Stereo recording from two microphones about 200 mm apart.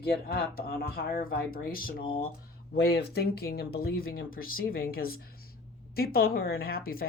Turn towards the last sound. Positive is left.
turn(degrees=50)  # may be behind; listen again after turning